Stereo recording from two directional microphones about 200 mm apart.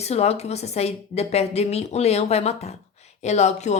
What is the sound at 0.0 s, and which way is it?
Speech, 30° left (ahead or behind).